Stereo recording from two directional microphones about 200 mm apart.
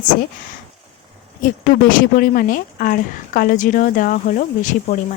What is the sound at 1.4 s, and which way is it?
A woman's voice, 40° left (ahead or behind).